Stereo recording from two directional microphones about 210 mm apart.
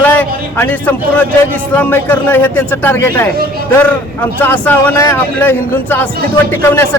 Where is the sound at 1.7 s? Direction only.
10° left (ahead or behind).